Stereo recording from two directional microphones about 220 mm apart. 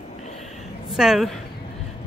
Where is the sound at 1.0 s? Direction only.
Centre (ahead or behind).